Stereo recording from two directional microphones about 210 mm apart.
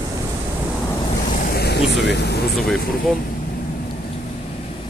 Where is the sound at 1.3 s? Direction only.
45° left (ahead or behind).